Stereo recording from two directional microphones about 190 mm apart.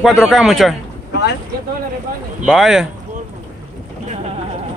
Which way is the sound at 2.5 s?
Centre (ahead or behind).